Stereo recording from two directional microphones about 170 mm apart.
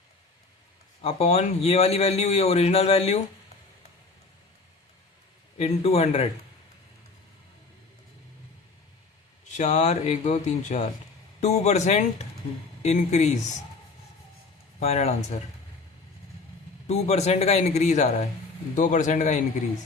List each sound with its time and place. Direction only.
1.0 s speech: 40° left (ahead or behind)
5.5 s speech: 35° left (ahead or behind)
9.5 s a man's voice: 45° left (ahead or behind)
14.8 s speech: 40° left (ahead or behind)
16.8 s a man's voice: 40° left (ahead or behind)